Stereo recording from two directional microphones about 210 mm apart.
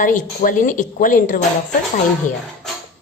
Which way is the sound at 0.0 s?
40° left (ahead or behind).